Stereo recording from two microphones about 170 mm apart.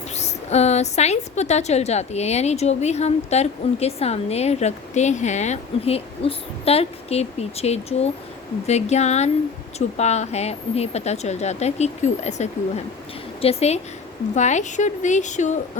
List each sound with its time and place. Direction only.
0.2 s a woman's voice: 40° left (ahead or behind)